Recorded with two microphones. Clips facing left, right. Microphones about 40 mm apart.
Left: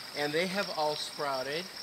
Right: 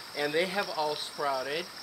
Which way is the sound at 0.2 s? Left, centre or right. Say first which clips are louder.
Right 2 dB; centre.